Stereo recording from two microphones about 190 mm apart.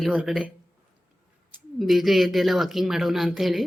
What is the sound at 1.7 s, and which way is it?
Speech, centre (ahead or behind).